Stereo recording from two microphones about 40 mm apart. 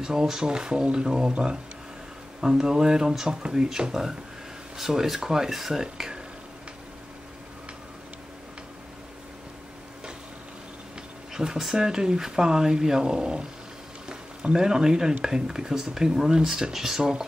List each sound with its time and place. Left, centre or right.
0.0 s speech: centre
11.3 s speech: centre